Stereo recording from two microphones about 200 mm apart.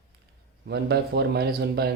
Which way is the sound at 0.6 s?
55° right (ahead or behind).